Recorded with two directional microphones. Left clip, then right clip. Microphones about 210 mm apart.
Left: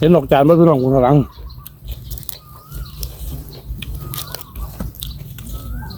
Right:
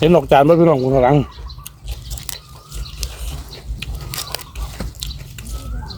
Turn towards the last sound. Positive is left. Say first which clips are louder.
# right 3 dB
turn(degrees=-5)  # may be behind; listen again after turning